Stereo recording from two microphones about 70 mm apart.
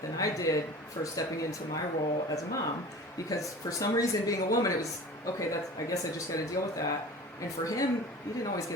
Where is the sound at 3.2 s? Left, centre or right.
Left.